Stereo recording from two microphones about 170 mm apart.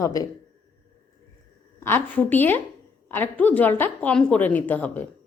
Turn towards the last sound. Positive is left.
turn(degrees=10)  # may be behind; listen again after turning